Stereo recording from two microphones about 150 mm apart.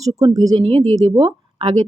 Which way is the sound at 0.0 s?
25° right (ahead or behind).